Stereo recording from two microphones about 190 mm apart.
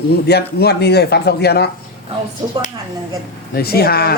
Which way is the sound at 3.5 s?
55° left (ahead or behind).